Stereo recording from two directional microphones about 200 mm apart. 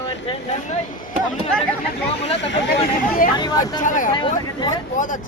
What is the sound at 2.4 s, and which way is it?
Speech, 60° left (ahead or behind).